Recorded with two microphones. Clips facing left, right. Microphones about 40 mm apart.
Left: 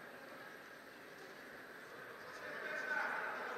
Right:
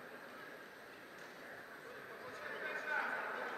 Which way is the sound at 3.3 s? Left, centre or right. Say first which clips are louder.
Right 1 dB; right.